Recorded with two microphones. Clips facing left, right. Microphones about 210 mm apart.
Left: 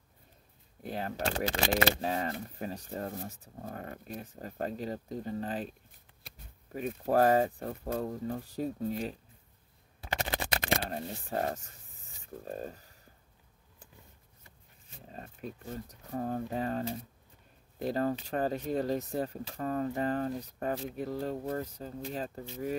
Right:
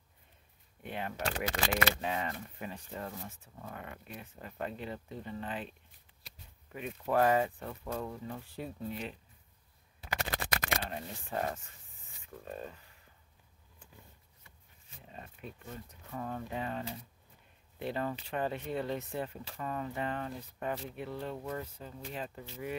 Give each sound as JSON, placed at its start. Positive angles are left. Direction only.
{"t": 0.8, "sound": "speech", "side_deg": 40}
{"t": 10.0, "sound": "a sound", "side_deg": 25}
{"t": 10.9, "sound": "speech", "side_deg": 40}
{"t": 15.0, "sound": "speech", "side_deg": 40}